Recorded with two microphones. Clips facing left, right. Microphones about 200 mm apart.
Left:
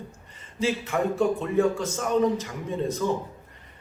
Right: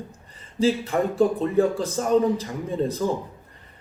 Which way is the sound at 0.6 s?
35° right (ahead or behind).